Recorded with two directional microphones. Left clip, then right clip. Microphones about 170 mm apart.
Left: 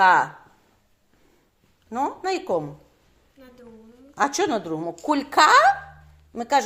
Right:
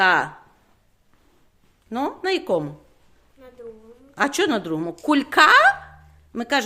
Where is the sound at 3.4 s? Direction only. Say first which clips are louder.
Right 3 dB; 20° right (ahead or behind).